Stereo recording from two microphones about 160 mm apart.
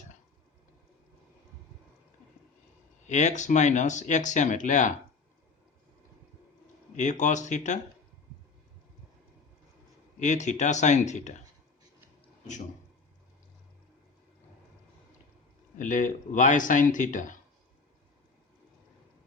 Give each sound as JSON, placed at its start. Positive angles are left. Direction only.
{"t": 3.1, "sound": "speech", "side_deg": 50}
{"t": 6.9, "sound": "speech", "side_deg": 50}
{"t": 10.2, "sound": "speech", "side_deg": 50}
{"t": 15.8, "sound": "speech", "side_deg": 50}